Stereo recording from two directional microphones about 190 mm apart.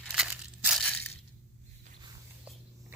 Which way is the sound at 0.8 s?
10° left (ahead or behind).